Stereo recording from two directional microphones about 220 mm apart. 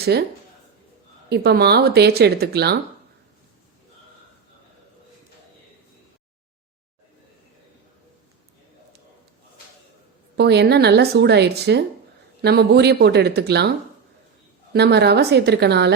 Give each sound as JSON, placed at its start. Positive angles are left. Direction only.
{"t": 0.1, "sound": "a woman's voice", "side_deg": -45}
{"t": 1.3, "sound": "a woman's voice", "side_deg": -50}
{"t": 10.3, "sound": "a woman's voice", "side_deg": -50}